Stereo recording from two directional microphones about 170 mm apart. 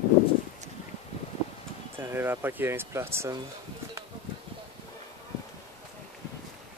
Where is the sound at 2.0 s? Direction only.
15° right (ahead or behind).